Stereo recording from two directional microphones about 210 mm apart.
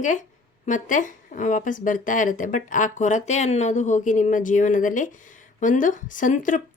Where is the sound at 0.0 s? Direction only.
35° left (ahead or behind).